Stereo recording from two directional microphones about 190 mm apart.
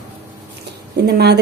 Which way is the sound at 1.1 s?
60° right (ahead or behind).